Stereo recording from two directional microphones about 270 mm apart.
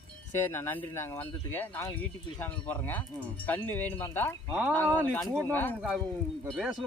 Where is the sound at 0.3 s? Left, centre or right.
Centre.